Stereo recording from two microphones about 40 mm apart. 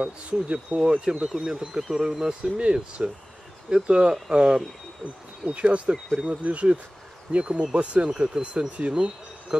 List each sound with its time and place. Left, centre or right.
0.0 s speech: right
1.7 s speech: centre; by 9.7 s right